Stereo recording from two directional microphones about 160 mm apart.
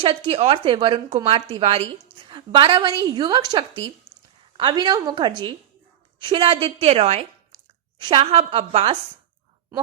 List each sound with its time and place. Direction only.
0.0 s a woman's voice: 35° right (ahead or behind)